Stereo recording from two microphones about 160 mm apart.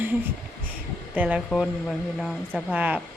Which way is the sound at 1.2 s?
10° right (ahead or behind).